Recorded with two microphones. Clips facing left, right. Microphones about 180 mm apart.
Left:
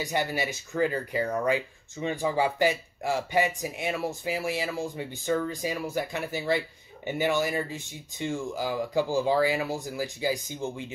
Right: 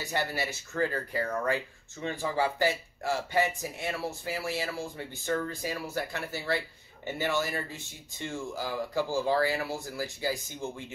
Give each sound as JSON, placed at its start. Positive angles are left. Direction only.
{"t": 0.0, "sound": "speech", "side_deg": 15}